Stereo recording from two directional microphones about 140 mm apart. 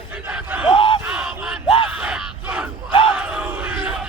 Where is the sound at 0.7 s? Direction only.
40° left (ahead or behind).